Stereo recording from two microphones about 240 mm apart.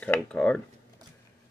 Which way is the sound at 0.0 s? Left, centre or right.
Centre.